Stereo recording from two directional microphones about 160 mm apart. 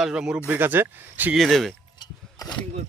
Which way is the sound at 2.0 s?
25° left (ahead or behind).